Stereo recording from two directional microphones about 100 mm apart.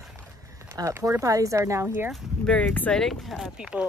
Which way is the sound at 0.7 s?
35° right (ahead or behind).